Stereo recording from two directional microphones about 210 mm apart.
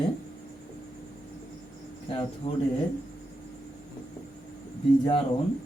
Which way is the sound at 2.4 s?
25° left (ahead or behind).